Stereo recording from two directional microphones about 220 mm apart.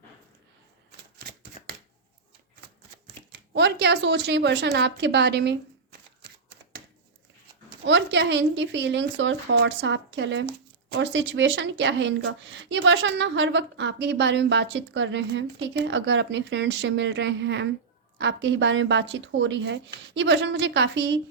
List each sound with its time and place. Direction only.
0.9 s shuffling cards: 45° right (ahead or behind)
3.3 s a woman's voice: 50° right (ahead or behind)
7.9 s a woman's voice: 55° right (ahead or behind)